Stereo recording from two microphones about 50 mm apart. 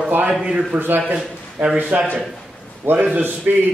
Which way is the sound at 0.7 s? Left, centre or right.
Right.